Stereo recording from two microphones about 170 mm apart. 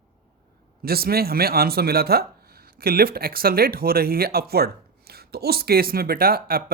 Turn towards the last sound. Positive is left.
turn(degrees=-60)  # may be behind; listen again after turning